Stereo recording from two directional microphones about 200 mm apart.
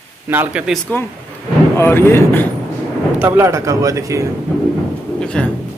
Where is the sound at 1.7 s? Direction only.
10° left (ahead or behind).